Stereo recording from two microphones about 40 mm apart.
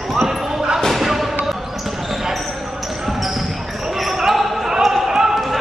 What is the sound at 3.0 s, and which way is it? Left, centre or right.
Basketball bounce, centre.